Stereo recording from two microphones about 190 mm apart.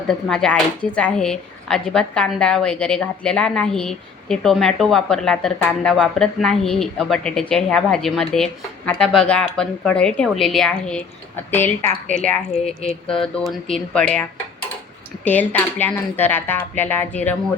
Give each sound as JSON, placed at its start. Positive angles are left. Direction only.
{"t": 0.1, "sound": "speech", "side_deg": 5}
{"t": 12.6, "sound": "speech", "side_deg": 35}
{"t": 13.1, "sound": "speech", "side_deg": 5}